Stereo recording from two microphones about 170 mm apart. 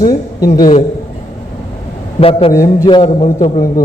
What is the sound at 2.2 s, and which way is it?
A man's voice, 35° left (ahead or behind).